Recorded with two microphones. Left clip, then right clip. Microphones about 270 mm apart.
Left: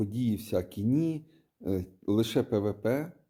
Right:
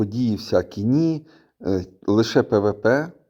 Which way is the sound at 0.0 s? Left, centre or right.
Centre.